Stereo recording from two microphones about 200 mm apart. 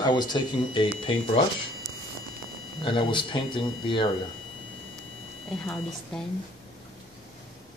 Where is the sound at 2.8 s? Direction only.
25° left (ahead or behind).